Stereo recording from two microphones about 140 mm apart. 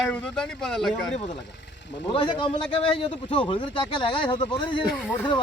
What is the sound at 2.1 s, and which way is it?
A man's voice, 35° left (ahead or behind).